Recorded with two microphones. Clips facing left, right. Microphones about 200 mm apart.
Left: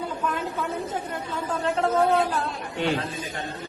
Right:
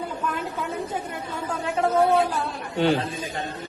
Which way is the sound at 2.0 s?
10° right (ahead or behind).